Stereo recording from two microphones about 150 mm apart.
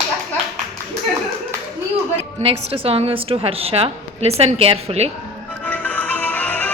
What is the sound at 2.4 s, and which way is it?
A woman's voice, 40° right (ahead or behind).